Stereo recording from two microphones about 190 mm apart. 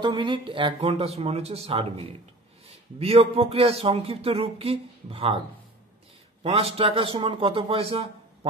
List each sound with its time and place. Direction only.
0.0 s speech: 25° right (ahead or behind)
6.4 s speech: 30° right (ahead or behind)